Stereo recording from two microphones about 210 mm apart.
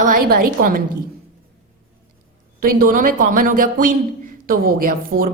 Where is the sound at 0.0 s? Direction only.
45° right (ahead or behind).